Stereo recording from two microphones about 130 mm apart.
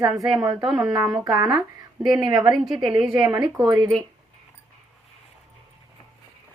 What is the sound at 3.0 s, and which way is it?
Speech, 30° right (ahead or behind).